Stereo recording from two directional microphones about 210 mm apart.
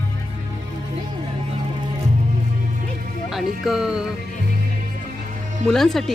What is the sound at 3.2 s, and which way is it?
Music, centre (ahead or behind).